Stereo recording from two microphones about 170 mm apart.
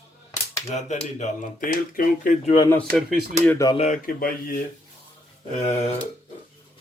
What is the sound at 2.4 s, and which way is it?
Speech, 30° left (ahead or behind).